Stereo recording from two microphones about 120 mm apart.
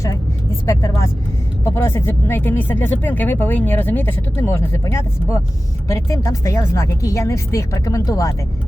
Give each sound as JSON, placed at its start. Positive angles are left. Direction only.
{"t": 0.7, "sound": "speech", "side_deg": 25}